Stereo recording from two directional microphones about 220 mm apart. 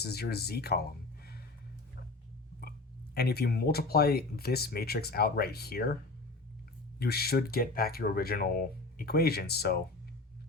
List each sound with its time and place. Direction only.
0.0 s speech: 45° left (ahead or behind)
3.2 s speech: 45° left (ahead or behind)
7.0 s speech: 45° left (ahead or behind)